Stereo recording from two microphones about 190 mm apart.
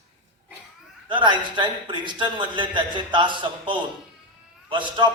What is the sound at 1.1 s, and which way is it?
A man's voice, 25° right (ahead or behind).